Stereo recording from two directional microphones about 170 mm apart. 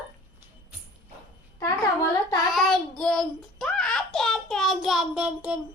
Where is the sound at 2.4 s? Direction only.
Centre (ahead or behind).